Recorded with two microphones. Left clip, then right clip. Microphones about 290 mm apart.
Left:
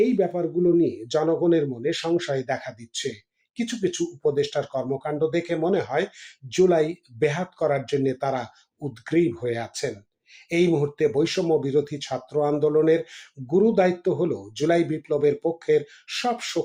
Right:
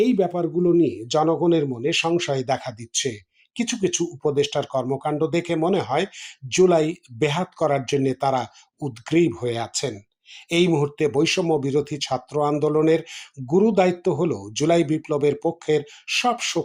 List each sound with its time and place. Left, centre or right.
0.0 s a man's voice: centre